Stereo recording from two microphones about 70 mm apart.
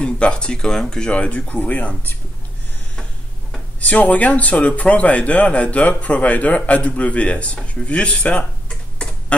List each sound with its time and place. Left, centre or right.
0.0 s speech: centre
3.8 s speech: left